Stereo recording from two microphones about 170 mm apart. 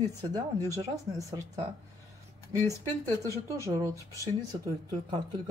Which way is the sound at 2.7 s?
15° left (ahead or behind).